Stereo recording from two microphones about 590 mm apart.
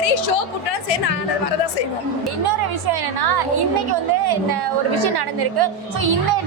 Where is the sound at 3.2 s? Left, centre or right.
Right.